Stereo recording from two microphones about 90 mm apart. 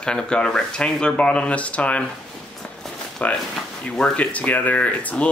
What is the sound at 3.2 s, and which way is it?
Speech, 15° left (ahead or behind).